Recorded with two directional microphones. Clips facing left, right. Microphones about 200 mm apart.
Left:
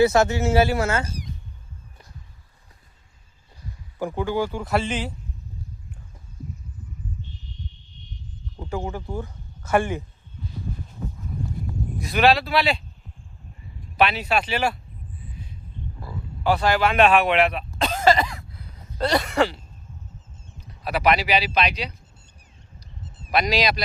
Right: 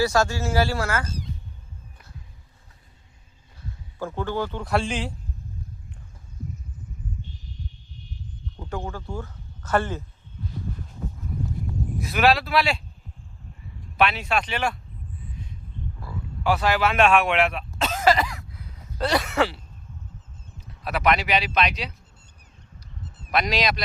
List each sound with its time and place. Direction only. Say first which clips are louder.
0.0 s speech: left 4 dB; 20° left (ahead or behind)
3.9 s speech: left 3 dB; 15° left (ahead or behind)
8.6 s speech: left 3 dB; 15° left (ahead or behind)
11.9 s speech: left 2 dB; centre (ahead or behind)
13.9 s speech: left 2 dB; centre (ahead or behind)
16.6 s speech: left 2 dB; centre (ahead or behind)
18.1 s cough: left 2 dB; 25° left (ahead or behind)
18.5 s a sound: even; 5° right (ahead or behind)
20.8 s speech: left 2 dB; 5° left (ahead or behind)
23.3 s speech: left 2 dB; centre (ahead or behind)